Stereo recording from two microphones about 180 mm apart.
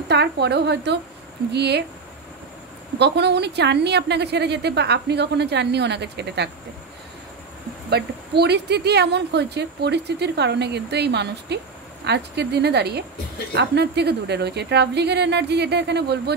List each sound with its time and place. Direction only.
0.1 s a woman's voice: 70° right (ahead or behind)
3.0 s a woman's voice: 70° right (ahead or behind)
7.9 s a woman's voice: 65° right (ahead or behind)